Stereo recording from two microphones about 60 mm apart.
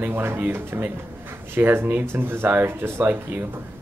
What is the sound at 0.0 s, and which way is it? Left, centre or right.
Speech, right.